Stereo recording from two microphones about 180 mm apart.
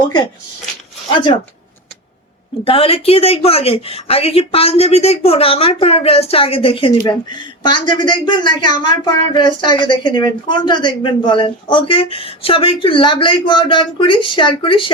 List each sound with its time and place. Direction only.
2.6 s speech: 30° left (ahead or behind)